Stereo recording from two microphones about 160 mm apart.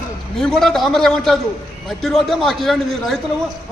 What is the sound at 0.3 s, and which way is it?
A man's voice, centre (ahead or behind).